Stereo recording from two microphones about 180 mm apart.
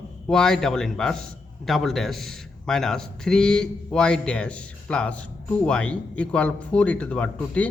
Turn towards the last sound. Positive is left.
turn(degrees=5)  # may be behind; listen again after turning